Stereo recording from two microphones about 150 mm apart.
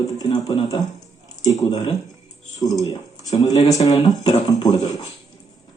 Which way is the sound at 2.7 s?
25° left (ahead or behind).